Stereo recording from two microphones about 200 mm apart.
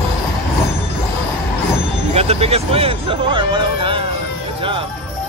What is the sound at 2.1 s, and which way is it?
Speech, 30° right (ahead or behind).